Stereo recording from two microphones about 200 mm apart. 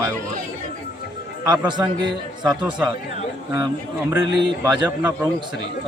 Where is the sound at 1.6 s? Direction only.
20° right (ahead or behind).